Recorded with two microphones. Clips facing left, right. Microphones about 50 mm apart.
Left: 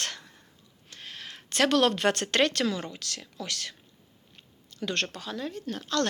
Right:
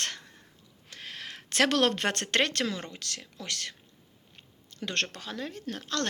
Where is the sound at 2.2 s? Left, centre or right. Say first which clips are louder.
Left 2 dB; right.